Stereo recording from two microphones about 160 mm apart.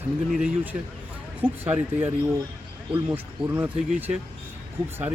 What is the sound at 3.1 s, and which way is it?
Speech, 10° right (ahead or behind).